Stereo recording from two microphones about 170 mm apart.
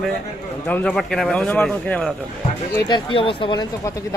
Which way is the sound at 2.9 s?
30° left (ahead or behind).